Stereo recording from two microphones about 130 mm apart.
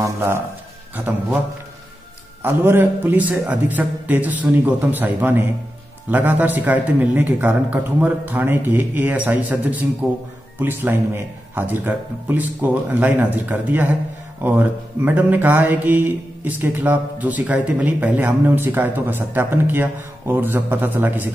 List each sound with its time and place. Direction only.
0.0 s a man's voice: 20° right (ahead or behind)
2.4 s speech: 15° right (ahead or behind)